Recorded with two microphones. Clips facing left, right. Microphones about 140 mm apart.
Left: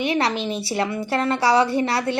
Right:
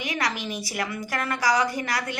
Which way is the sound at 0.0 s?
30° left (ahead or behind).